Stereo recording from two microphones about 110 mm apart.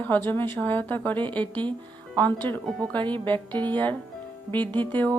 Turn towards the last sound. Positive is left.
turn(degrees=-45)  # may be behind; listen again after turning